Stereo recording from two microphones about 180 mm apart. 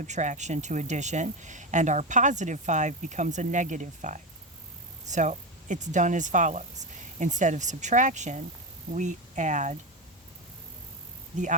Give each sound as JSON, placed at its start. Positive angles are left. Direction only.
{"t": 0.0, "sound": "speech", "side_deg": -40}